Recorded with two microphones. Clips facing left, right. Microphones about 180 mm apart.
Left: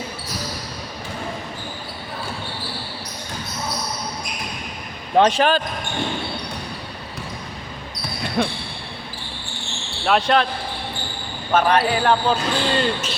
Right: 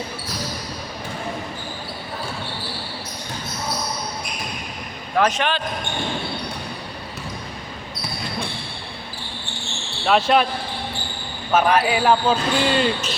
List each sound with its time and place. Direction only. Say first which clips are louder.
5.1 s speech: left 4 dB; 30° left (ahead or behind)
8.4 s speech: left 10 dB; 70° left (ahead or behind)
10.1 s speech: right 1 dB; 5° right (ahead or behind)
11.5 s speech: even; 5° right (ahead or behind)